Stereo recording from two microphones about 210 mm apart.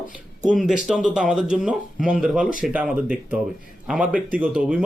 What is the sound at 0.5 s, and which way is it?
Speech, centre (ahead or behind).